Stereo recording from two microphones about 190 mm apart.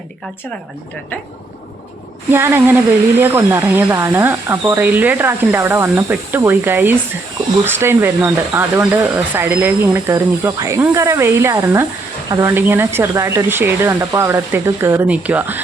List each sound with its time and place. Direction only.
2.3 s speech: 10° right (ahead or behind)